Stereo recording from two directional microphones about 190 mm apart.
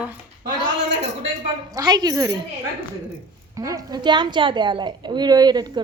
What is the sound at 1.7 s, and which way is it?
Speech, 20° right (ahead or behind).